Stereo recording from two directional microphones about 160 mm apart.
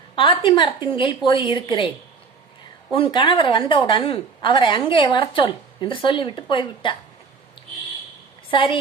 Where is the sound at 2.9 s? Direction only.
30° left (ahead or behind).